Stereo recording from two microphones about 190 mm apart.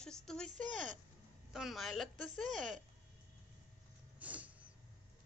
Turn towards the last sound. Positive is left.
turn(degrees=-5)  # may be behind; listen again after turning